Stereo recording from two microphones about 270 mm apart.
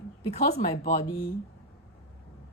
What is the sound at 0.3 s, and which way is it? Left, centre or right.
Speech, left.